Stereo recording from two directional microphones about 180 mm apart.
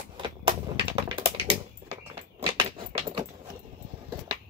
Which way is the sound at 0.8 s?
30° right (ahead or behind).